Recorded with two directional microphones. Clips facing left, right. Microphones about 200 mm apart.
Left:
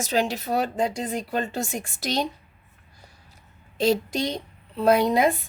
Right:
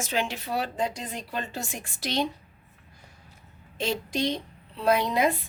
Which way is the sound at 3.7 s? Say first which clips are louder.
Left 6 dB; 40° left (ahead or behind).